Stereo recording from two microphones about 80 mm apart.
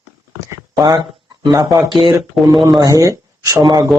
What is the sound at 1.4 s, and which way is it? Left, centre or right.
Speech, right.